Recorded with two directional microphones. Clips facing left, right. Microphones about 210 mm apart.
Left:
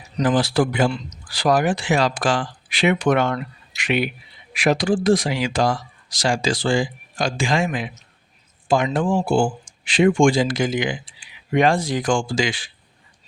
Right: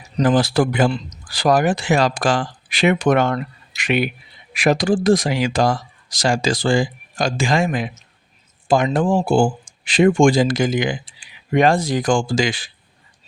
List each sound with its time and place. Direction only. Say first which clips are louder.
0.3 s speech: right 2 dB; 45° right (ahead or behind)